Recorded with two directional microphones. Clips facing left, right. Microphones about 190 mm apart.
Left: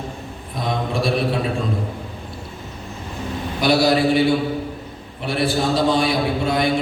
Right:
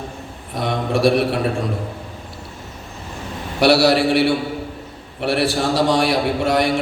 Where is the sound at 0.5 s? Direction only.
75° right (ahead or behind).